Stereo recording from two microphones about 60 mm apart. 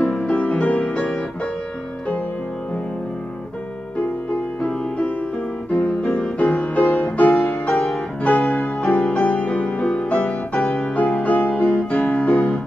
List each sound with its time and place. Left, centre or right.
0.2 s music: left
4.6 s music: left
7.3 s music: centre